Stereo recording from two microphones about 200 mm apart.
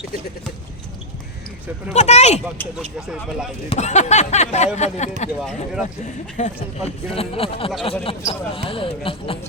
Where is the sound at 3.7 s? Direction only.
35° left (ahead or behind).